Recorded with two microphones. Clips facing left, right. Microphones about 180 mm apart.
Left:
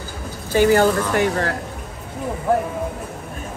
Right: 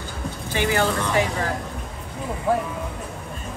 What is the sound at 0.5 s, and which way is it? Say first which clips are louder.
Speech: left 8 dB; 45° left (ahead or behind).